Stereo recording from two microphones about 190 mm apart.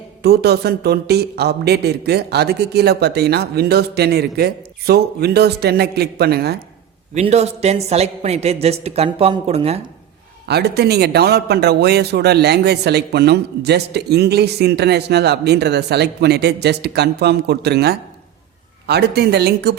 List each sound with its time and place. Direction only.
0.2 s a man's voice: 60° right (ahead or behind)
7.1 s a man's voice: 35° right (ahead or behind)
10.5 s a man's voice: 60° right (ahead or behind)